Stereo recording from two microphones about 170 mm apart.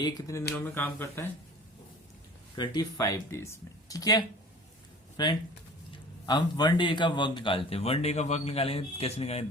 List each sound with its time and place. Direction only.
0.0 s speech: 20° left (ahead or behind)
2.6 s a man's voice: 20° left (ahead or behind); by 9.5 s 35° left (ahead or behind)